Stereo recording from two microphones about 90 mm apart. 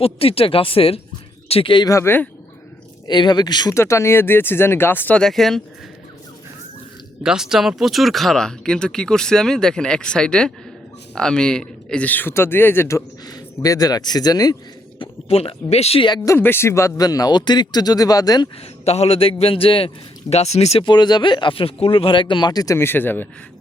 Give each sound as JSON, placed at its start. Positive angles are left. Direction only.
{"t": 0.0, "sound": "speech", "side_deg": 90}
{"t": 1.5, "sound": "speech", "side_deg": 80}
{"t": 1.9, "sound": "speech", "side_deg": 35}
{"t": 3.1, "sound": "speech", "side_deg": 55}
{"t": 3.8, "sound": "a man's voice", "side_deg": 30}
{"t": 5.1, "sound": "speech", "side_deg": 5}
{"t": 7.2, "sound": "a man's voice", "side_deg": -5}
{"t": 13.2, "sound": "speech", "side_deg": 45}
{"t": 14.9, "sound": "speech", "side_deg": 85}
{"t": 16.4, "sound": "speech", "side_deg": 25}
{"t": 19.1, "sound": "speech", "side_deg": 90}
{"t": 20.3, "sound": "speech", "side_deg": 45}
{"t": 20.7, "sound": "speech", "side_deg": 55}
{"t": 22.8, "sound": "a man's voice", "side_deg": 25}